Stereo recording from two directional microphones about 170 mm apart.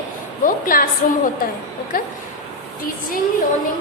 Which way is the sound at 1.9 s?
60° left (ahead or behind).